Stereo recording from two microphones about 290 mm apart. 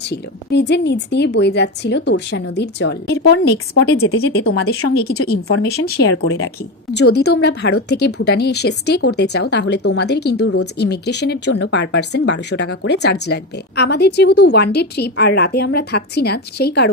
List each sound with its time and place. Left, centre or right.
0.0 s speech: left
4.4 s speech: left
10.3 s speech: left
10.8 s speech: left